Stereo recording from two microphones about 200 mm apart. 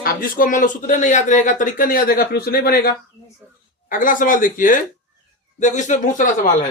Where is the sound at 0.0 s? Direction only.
45° left (ahead or behind).